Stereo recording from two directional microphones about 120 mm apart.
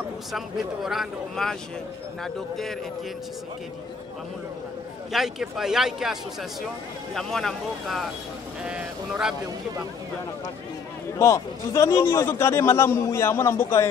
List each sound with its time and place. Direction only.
0.8 s speech: centre (ahead or behind)
5.1 s speech: 5° right (ahead or behind)
7.2 s speech: 5° left (ahead or behind)
11.1 s a man's voice: 25° left (ahead or behind)